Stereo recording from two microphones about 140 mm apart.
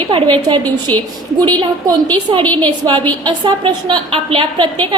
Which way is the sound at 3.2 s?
35° right (ahead or behind).